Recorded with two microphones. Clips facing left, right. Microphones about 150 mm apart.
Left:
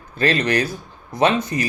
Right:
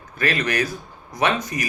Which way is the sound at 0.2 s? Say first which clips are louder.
Left 4 dB; 30° left (ahead or behind).